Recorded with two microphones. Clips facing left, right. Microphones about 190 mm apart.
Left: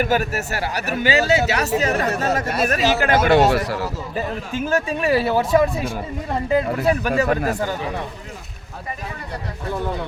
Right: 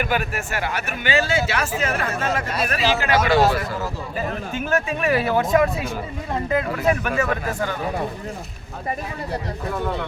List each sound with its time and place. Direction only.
0.0 s speech: 40° left (ahead or behind); by 3.8 s 65° left (ahead or behind)
4.7 s speech: 30° left (ahead or behind)